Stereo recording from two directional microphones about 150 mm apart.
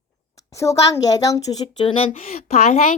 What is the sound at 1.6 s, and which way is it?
Speech, 35° left (ahead or behind).